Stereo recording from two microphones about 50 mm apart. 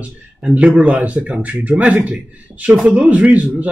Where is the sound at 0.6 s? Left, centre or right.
Right.